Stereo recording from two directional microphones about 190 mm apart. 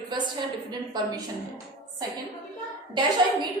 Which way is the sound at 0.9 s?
20° right (ahead or behind).